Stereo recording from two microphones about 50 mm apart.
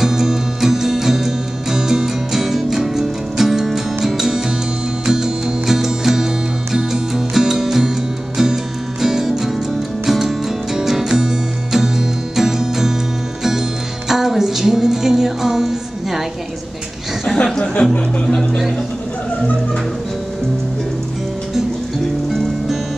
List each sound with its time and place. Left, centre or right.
0.0 s music: centre
9.0 s music: centre
14.0 s music: centre
17.8 s speech: left
18.2 s speech: centre